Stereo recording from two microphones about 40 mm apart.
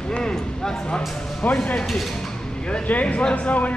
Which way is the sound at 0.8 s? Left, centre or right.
Left.